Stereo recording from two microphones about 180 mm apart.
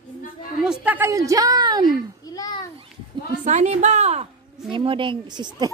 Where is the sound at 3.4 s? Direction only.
40° right (ahead or behind); by 5.7 s 25° right (ahead or behind).